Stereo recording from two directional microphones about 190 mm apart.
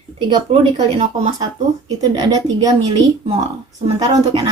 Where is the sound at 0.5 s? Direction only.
30° right (ahead or behind).